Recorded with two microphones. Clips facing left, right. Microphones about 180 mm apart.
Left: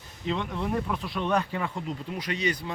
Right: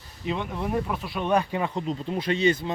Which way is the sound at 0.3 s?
10° right (ahead or behind).